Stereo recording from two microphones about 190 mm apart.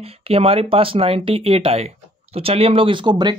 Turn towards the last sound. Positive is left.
turn(degrees=-25)  # may be behind; listen again after turning